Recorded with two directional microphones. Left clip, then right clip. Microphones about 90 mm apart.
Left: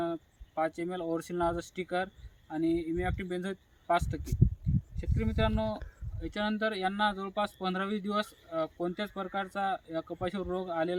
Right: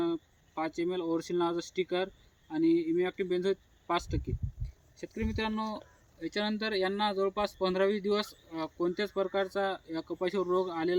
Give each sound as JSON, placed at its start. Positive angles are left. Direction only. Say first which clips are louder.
{"t": 0.0, "sound": "speech", "louder": "right 2 dB", "side_deg": 25}